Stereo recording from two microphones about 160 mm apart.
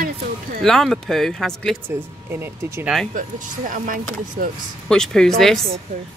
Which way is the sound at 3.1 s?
55° right (ahead or behind).